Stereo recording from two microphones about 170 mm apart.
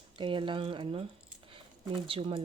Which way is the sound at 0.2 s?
30° right (ahead or behind).